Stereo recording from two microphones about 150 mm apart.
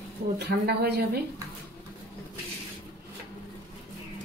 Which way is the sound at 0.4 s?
90° right.